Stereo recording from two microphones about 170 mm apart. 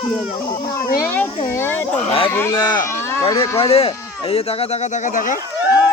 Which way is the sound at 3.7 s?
35° left (ahead or behind).